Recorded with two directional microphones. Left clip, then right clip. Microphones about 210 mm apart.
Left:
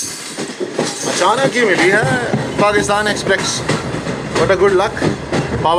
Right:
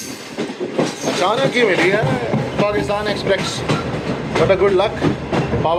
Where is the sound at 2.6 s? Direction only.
15° left (ahead or behind).